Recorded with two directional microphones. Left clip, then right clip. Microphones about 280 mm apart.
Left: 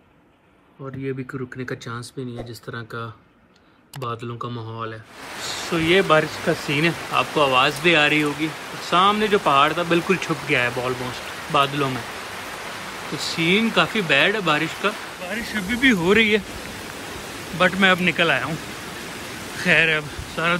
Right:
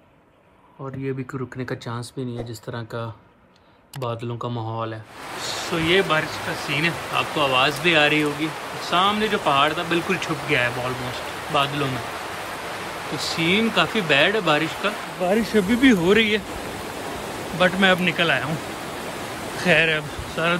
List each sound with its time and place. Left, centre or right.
4.4 s speech: centre
5.5 s speech: centre
13.3 s speech: centre
15.2 s speech: right
17.0 s a sound: right
17.6 s speech: centre
19.0 s a sound: right
19.6 s speech: centre